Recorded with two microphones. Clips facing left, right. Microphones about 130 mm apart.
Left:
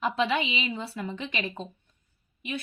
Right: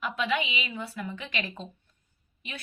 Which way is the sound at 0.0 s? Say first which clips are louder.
Left 3 dB; 30° left (ahead or behind).